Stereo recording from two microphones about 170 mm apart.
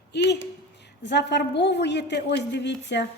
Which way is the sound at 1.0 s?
90° left.